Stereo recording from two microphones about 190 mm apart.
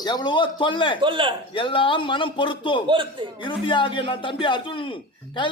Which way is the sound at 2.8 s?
25° right (ahead or behind).